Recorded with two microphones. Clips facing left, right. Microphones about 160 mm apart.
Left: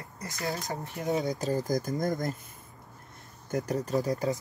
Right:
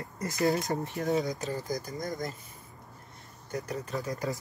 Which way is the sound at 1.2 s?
35° left (ahead or behind).